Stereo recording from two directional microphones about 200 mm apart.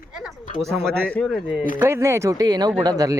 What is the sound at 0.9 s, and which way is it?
Speech, 5° left (ahead or behind).